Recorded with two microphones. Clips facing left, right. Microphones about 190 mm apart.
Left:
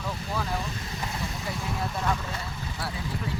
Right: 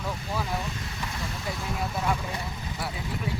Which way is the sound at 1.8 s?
10° right (ahead or behind).